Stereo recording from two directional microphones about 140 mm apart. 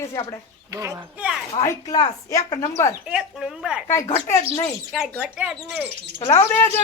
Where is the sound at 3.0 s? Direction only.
5° right (ahead or behind).